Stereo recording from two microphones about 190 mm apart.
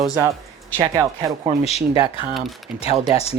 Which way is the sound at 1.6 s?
35° left (ahead or behind).